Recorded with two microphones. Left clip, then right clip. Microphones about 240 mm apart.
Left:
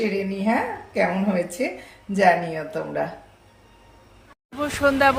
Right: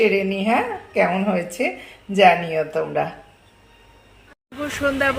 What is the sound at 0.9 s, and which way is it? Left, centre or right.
Speech, centre.